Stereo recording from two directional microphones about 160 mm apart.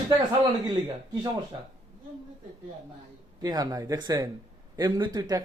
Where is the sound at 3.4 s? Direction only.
25° right (ahead or behind).